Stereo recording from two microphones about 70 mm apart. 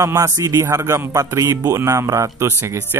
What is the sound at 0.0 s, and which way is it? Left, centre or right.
A man's voice, right.